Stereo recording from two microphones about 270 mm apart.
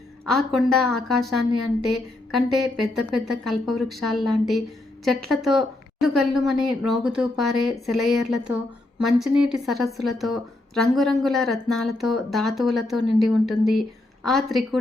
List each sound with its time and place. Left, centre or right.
0.3 s a woman's voice: centre